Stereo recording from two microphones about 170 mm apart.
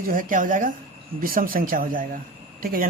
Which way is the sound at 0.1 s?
50° right (ahead or behind).